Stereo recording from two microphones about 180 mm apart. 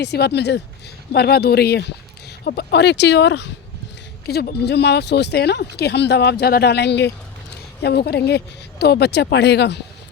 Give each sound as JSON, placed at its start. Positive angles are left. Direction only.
{"t": 0.0, "sound": "speech", "side_deg": 65}
{"t": 4.3, "sound": "speech", "side_deg": 60}